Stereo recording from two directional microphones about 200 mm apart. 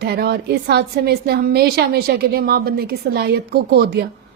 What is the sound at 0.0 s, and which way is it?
A woman's voice, 55° right (ahead or behind).